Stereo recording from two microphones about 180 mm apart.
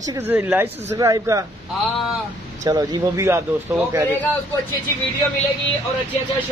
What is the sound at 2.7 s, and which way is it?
Speech, 15° right (ahead or behind).